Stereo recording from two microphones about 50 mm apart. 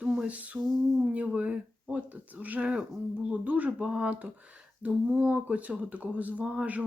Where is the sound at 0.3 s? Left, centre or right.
Right.